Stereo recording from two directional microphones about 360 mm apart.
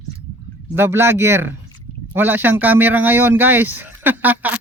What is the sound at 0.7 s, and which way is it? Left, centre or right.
A man's voice, centre.